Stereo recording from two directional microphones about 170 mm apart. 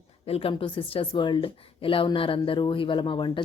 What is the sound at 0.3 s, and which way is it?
A woman's voice, 35° left (ahead or behind).